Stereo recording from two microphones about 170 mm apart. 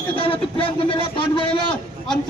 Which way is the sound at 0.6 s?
30° left (ahead or behind).